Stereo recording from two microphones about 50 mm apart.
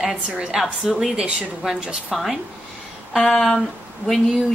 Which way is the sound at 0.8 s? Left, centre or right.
Centre.